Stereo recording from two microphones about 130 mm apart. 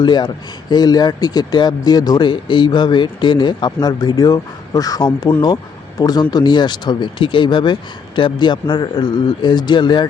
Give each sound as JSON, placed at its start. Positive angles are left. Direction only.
{"t": 0.0, "sound": "speech", "side_deg": 35}